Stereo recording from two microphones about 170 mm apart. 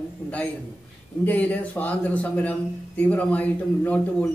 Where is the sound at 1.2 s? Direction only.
10° left (ahead or behind).